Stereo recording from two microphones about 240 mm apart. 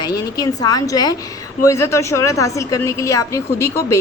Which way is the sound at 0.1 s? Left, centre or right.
Centre.